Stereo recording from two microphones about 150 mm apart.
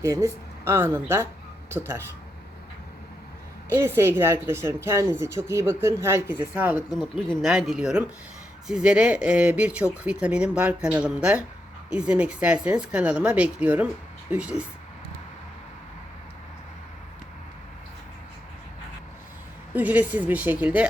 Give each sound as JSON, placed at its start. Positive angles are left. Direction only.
{"t": 0.0, "sound": "speech", "side_deg": -20}
{"t": 3.7, "sound": "speech", "side_deg": -15}
{"t": 6.9, "sound": "speech", "side_deg": 5}
{"t": 19.7, "sound": "speech", "side_deg": -10}